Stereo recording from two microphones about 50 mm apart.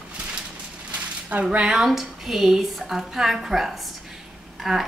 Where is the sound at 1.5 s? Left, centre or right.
Centre.